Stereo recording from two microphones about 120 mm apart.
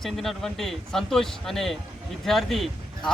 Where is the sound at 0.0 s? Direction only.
Centre (ahead or behind).